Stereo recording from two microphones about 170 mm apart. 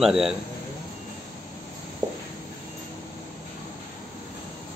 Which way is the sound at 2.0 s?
20° right (ahead or behind).